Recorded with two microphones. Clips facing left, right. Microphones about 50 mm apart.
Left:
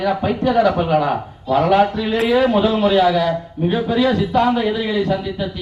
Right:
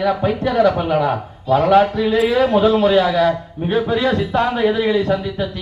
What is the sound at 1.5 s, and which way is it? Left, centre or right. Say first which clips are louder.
A man's voice: right 1 dB; centre.